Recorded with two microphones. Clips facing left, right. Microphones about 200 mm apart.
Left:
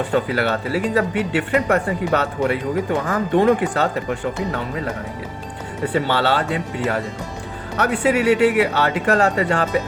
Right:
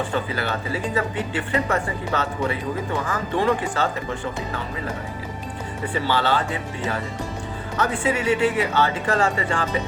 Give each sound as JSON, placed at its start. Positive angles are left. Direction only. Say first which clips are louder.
{"t": 0.1, "sound": "speech", "louder": "left 6 dB", "side_deg": 65}
{"t": 5.9, "sound": "speech", "louder": "left 3 dB", "side_deg": 65}
{"t": 7.8, "sound": "speech", "louder": "left 5 dB", "side_deg": 65}